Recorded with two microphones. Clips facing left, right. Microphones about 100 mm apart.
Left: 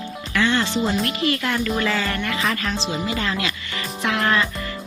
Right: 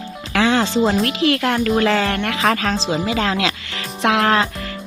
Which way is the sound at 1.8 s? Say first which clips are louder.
Right 5 dB; 75° right (ahead or behind).